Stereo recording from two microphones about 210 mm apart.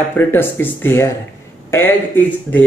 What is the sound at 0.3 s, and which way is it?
Speech, 10° left (ahead or behind).